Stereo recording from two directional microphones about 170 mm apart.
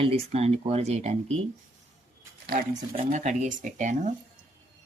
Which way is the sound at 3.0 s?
45° right (ahead or behind).